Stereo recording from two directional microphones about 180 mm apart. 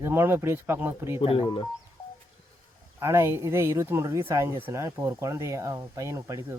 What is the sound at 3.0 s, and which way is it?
Speech, 15° right (ahead or behind).